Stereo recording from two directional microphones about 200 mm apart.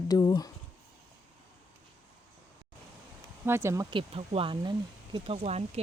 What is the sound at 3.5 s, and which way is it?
Speech, 10° right (ahead or behind).